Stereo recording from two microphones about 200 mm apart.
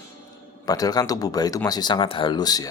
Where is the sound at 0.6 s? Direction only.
20° left (ahead or behind).